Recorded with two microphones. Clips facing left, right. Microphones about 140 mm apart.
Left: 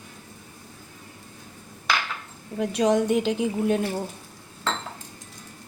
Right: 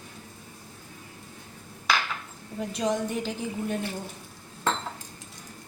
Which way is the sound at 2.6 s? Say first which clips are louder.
Left 6 dB; 70° left (ahead or behind).